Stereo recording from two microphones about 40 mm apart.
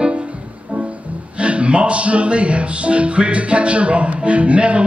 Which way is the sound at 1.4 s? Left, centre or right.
Right.